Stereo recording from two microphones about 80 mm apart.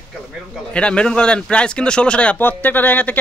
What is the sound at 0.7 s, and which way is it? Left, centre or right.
Speech, centre.